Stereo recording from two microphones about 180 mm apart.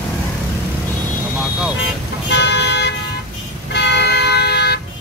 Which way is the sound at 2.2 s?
70° left (ahead or behind).